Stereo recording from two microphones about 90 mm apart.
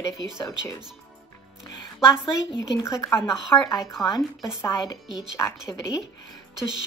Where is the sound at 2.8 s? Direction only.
30° left (ahead or behind).